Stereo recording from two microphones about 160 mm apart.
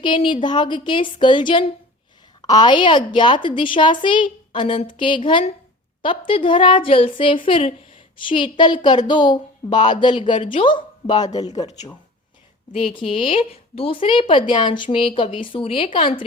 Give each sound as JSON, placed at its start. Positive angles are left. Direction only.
{"t": 0.0, "sound": "a woman's voice", "side_deg": 30}
{"t": 12.7, "sound": "speech", "side_deg": 35}